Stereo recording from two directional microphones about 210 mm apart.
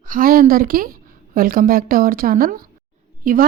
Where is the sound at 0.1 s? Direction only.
45° right (ahead or behind).